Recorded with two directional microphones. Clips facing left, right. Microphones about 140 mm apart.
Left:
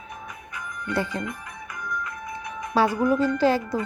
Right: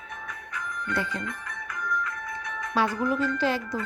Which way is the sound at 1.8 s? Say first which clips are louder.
Right 1 dB; 15° left (ahead or behind).